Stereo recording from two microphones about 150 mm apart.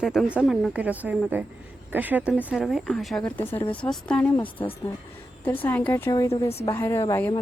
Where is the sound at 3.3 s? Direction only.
15° left (ahead or behind).